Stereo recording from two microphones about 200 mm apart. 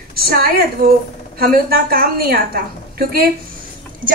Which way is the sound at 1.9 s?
45° right (ahead or behind).